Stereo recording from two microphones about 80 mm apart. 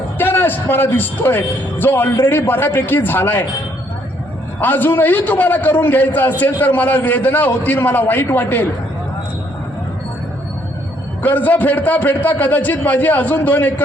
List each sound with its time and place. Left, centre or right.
0.2 s a man's voice: left
4.6 s a man's voice: left
11.2 s a man's voice: centre